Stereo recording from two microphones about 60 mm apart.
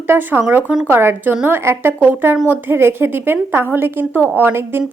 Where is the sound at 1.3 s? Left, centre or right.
Right.